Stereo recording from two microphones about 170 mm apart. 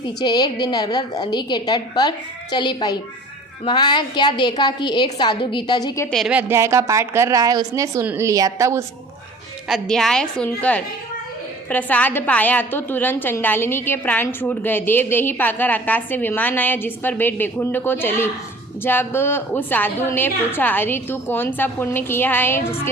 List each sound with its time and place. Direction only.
0.2 s a woman's voice: 25° left (ahead or behind)
6.1 s a woman's voice: centre (ahead or behind)
6.5 s a woman's voice: 15° right (ahead or behind)
9.6 s a woman's voice: centre (ahead or behind)